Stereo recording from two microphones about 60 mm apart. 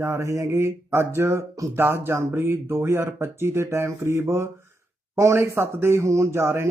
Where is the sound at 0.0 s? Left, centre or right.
Right.